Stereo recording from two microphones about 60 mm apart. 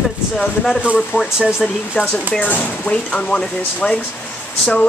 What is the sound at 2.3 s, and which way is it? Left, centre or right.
Speech, left.